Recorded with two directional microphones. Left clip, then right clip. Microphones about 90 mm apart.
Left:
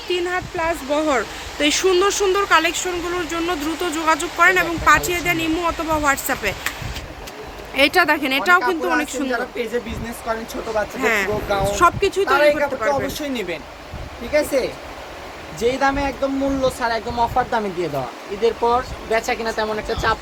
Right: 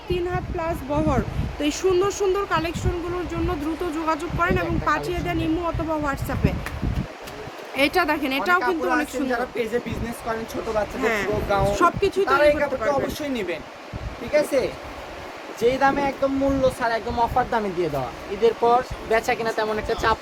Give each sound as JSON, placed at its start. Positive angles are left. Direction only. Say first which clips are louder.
{"t": 0.1, "sound": "speech", "louder": "left 4 dB", "side_deg": 5}
{"t": 1.5, "sound": "speech", "louder": "left 5 dB", "side_deg": 10}
{"t": 7.8, "sound": "speech", "louder": "left 5 dB", "side_deg": 5}
{"t": 9.6, "sound": "speech", "louder": "left 1 dB", "side_deg": -40}
{"t": 10.3, "sound": "speech", "louder": "left 4 dB", "side_deg": -20}
{"t": 11.0, "sound": "speech", "louder": "left 6 dB", "side_deg": 20}
{"t": 15.6, "sound": "speech", "louder": "left 1 dB", "side_deg": 30}
{"t": 18.4, "sound": "speech", "louder": "even", "side_deg": -5}